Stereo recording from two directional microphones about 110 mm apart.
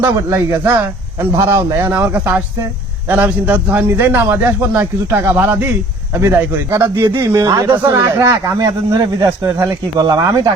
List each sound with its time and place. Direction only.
0.0 s a man's voice: 25° right (ahead or behind)
1.9 s a man's voice: 20° right (ahead or behind)
3.1 s a man's voice: 15° right (ahead or behind); by 10.5 s 35° right (ahead or behind)